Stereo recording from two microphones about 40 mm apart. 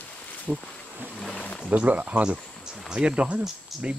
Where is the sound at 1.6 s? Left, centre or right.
Right.